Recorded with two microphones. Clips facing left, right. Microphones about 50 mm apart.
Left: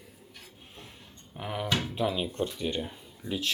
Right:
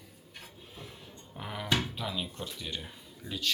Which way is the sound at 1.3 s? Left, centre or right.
Centre.